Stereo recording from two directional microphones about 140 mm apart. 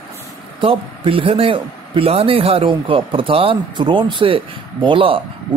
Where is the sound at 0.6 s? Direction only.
40° right (ahead or behind).